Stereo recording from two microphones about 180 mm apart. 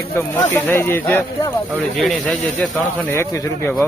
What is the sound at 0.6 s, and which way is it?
Speech, 10° left (ahead or behind).